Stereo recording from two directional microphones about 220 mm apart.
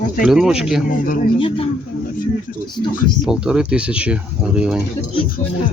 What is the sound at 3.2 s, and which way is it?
Speech, 5° right (ahead or behind).